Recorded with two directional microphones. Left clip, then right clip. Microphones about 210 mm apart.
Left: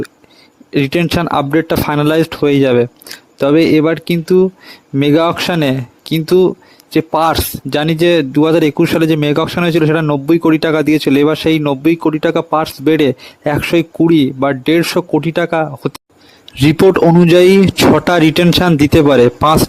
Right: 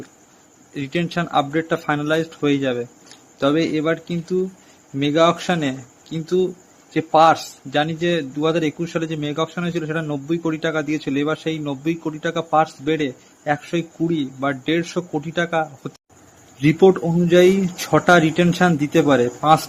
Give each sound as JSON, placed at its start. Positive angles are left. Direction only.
{"t": 0.7, "sound": "speech", "side_deg": 45}